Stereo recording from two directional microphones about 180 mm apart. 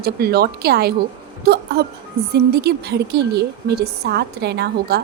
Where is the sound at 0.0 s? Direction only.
60° right (ahead or behind).